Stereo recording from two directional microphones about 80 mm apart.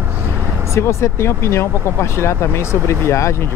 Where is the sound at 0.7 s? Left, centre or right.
Left.